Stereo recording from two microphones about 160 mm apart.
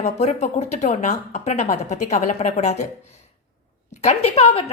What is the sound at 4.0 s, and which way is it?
Speech, 40° left (ahead or behind).